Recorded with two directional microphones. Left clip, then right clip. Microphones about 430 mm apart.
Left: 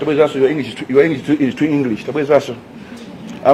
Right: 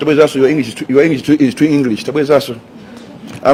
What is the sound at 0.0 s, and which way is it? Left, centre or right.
Speech, right.